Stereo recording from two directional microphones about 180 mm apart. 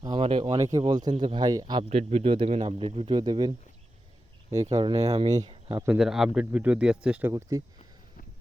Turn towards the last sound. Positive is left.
turn(degrees=-15)  # may be behind; listen again after turning